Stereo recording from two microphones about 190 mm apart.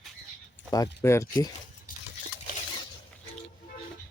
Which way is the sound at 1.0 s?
15° left (ahead or behind).